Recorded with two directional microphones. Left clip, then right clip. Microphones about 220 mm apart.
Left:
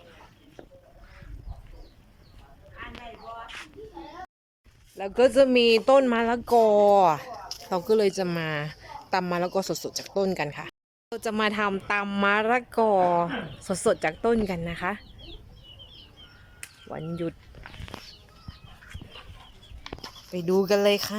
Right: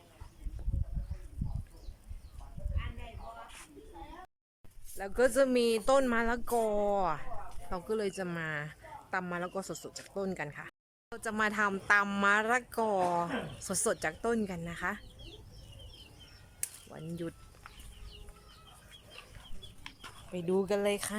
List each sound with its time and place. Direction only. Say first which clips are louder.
4.9 s speech: left 8 dB; 5° left (ahead or behind)
16.9 s speech: left 11 dB; 10° left (ahead or behind)
19.8 s chicken: left 9 dB; 25° left (ahead or behind)
20.3 s speech: left 8 dB; centre (ahead or behind)